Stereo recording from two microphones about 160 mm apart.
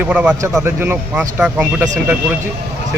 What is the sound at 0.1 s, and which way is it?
Speech, 5° right (ahead or behind).